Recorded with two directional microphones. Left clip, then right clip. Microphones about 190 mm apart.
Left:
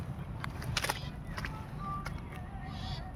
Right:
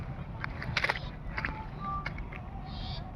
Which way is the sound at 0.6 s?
10° left (ahead or behind).